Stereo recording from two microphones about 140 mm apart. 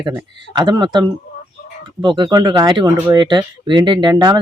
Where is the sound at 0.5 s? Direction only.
30° right (ahead or behind).